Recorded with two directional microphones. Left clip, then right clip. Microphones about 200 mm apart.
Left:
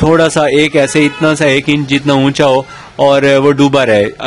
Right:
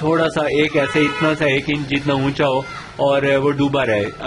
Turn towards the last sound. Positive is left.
turn(degrees=50)  # may be behind; listen again after turning